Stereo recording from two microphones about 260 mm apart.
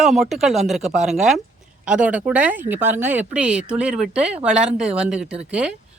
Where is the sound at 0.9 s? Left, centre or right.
Right.